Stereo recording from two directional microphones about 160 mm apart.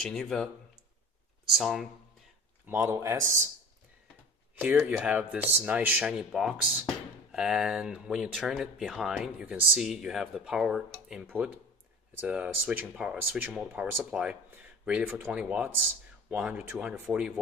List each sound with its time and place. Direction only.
0.0 s speech: 5° left (ahead or behind)
1.5 s speech: centre (ahead or behind)
2.6 s speech: 15° right (ahead or behind)
4.6 s speech: 10° right (ahead or behind)